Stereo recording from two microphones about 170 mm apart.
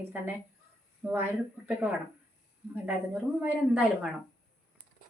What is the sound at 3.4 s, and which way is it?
Speech, 5° right (ahead or behind).